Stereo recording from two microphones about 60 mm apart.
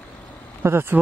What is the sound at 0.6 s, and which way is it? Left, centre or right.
Speech, right.